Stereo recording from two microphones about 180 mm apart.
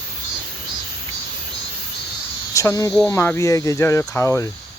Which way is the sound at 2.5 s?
20° left (ahead or behind).